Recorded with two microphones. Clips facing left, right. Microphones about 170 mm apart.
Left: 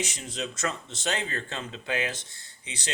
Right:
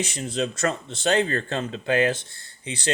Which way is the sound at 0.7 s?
35° right (ahead or behind).